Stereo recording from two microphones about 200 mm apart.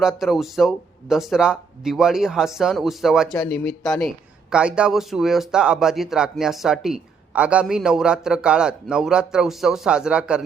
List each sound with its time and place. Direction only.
0.0 s a man's voice: centre (ahead or behind)